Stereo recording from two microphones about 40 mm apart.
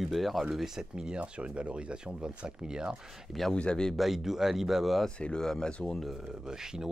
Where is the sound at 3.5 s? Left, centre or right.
Left.